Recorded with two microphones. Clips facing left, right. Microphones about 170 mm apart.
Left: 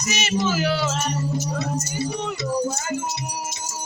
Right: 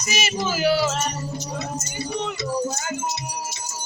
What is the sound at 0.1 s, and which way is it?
Speech, 10° right (ahead or behind).